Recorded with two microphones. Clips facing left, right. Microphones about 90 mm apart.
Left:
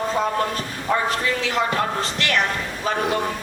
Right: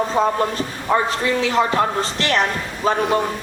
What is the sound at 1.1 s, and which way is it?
Speech, 35° right (ahead or behind).